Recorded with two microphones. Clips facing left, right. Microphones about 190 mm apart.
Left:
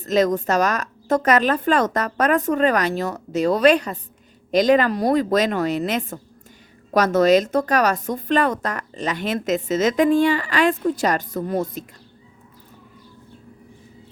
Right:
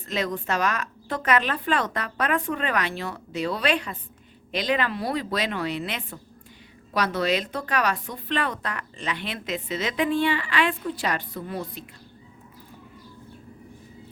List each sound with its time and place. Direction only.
0.0 s speech: 40° left (ahead or behind)